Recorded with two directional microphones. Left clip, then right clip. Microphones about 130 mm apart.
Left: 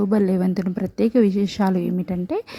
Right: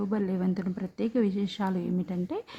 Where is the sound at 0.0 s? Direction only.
40° left (ahead or behind).